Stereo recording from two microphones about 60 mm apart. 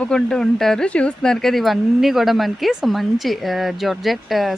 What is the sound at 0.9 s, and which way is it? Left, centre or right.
Speech, left.